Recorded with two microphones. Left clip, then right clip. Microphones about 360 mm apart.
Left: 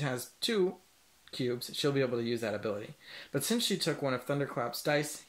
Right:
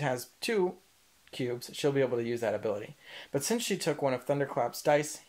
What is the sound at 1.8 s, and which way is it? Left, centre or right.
Speech, centre.